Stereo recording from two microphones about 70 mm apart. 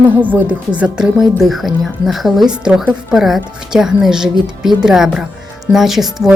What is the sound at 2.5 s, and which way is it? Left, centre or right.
A woman's voice, centre.